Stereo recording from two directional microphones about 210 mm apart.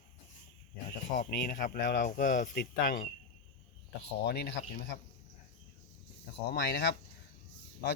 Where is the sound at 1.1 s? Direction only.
40° left (ahead or behind).